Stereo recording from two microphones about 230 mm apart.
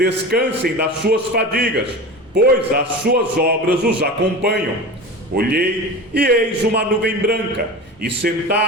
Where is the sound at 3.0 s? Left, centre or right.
Right.